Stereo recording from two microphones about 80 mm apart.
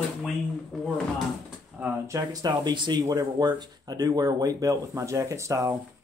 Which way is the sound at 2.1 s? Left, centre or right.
Right.